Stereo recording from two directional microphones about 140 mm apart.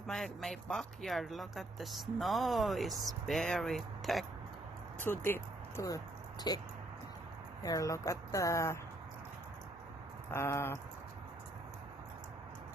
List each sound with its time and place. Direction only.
0.1 s speech: 5° left (ahead or behind)
4.9 s speech: 15° left (ahead or behind)
10.3 s speech: 20° left (ahead or behind)